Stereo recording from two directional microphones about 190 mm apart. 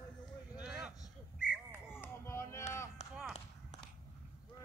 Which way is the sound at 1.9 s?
10° left (ahead or behind).